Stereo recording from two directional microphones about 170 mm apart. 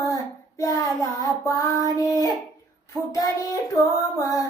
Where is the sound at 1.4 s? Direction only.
20° left (ahead or behind).